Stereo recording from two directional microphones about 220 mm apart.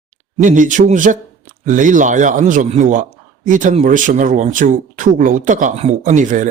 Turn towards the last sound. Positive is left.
turn(degrees=-35)  # may be behind; listen again after turning